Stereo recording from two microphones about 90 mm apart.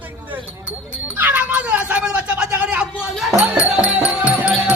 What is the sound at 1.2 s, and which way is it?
Cat, 20° right (ahead or behind).